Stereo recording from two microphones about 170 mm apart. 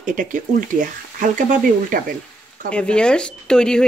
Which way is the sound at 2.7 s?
5° left (ahead or behind).